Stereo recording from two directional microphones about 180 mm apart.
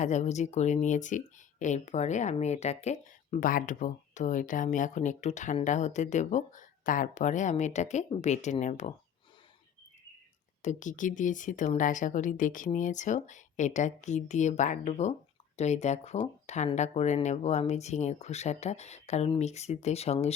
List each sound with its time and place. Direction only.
0.0 s speech: 40° left (ahead or behind)
10.6 s speech: 40° left (ahead or behind)